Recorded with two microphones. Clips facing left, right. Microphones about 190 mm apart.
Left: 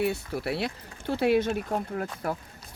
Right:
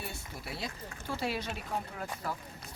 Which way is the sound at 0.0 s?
70° left (ahead or behind).